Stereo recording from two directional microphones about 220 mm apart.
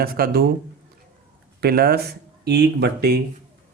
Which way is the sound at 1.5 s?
45° right (ahead or behind).